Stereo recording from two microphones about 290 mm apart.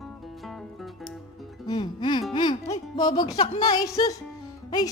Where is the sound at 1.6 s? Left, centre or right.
Centre.